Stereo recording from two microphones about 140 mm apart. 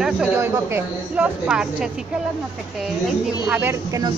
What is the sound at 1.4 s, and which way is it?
Speech, 5° right (ahead or behind).